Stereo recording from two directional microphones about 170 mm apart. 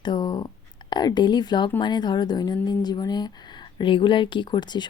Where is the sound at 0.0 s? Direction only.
25° left (ahead or behind).